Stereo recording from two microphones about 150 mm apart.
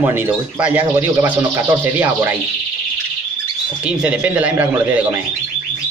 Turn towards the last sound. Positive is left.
turn(degrees=-10)  # may be behind; listen again after turning